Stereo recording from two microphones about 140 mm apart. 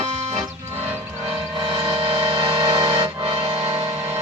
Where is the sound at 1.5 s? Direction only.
40° right (ahead or behind).